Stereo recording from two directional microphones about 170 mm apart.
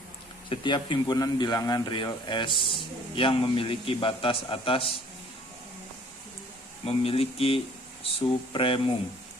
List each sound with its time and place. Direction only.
0.5 s a man's voice: 30° left (ahead or behind)
6.8 s a man's voice: 35° left (ahead or behind)